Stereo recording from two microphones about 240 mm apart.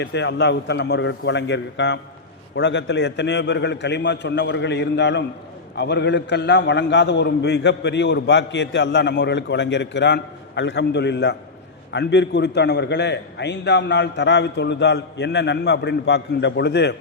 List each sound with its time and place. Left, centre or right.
0.0 s a man's voice: left